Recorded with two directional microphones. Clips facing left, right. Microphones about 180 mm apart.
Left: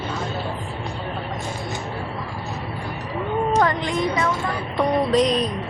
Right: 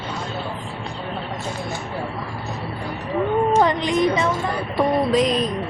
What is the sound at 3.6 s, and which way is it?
Speech, 20° right (ahead or behind).